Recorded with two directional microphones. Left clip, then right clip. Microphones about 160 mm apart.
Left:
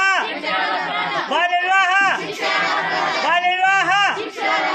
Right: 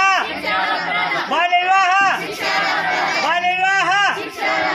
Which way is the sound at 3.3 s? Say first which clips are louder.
Left 2 dB; 10° right (ahead or behind).